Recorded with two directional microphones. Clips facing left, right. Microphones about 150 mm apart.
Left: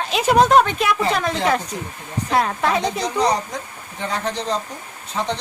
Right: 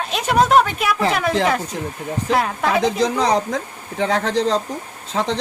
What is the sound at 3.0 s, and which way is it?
Speech, 90° right.